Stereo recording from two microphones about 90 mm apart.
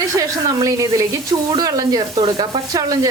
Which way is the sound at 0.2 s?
40° right (ahead or behind).